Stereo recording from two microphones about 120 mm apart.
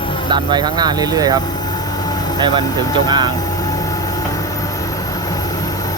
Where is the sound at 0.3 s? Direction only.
40° right (ahead or behind).